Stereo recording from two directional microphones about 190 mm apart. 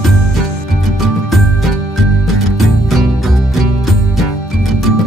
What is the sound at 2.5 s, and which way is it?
Music, centre (ahead or behind).